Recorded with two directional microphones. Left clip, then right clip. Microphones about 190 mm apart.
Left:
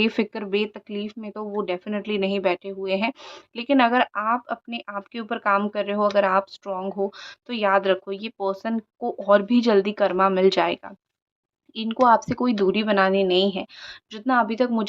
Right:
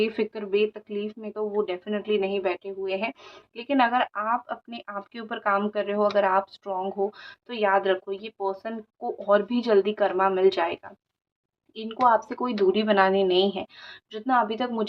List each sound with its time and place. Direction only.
0.0 s speech: 40° left (ahead or behind)